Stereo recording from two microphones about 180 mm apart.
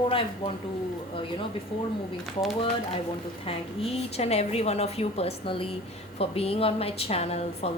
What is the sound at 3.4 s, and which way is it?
A woman's voice, 35° left (ahead or behind).